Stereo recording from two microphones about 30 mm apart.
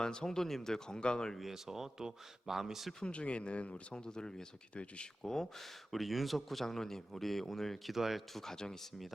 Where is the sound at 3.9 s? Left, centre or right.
Left.